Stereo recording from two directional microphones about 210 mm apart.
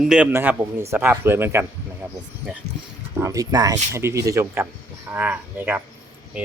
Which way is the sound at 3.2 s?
15° right (ahead or behind).